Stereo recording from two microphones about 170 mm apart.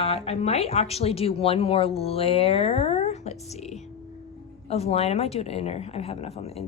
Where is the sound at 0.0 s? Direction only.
35° left (ahead or behind).